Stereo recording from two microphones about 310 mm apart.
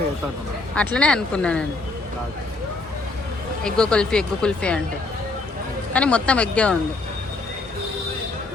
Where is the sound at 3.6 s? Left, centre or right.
Centre.